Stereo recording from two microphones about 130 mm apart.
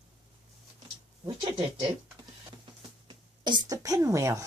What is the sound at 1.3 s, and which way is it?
Speech, 45° right (ahead or behind).